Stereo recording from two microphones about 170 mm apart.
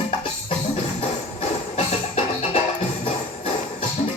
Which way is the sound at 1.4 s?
40° left (ahead or behind).